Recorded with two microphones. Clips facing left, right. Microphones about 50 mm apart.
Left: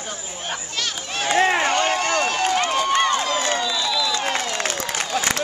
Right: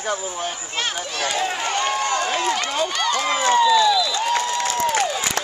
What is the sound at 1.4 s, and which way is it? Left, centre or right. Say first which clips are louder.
Run: left 6 dB; left.